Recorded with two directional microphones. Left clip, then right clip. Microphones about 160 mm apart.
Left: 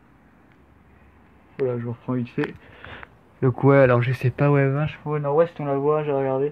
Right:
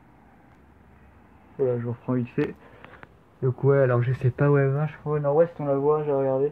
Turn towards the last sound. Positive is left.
turn(degrees=20)  # may be behind; listen again after turning